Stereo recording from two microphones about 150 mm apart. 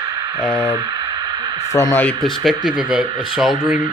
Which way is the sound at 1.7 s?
20° left (ahead or behind).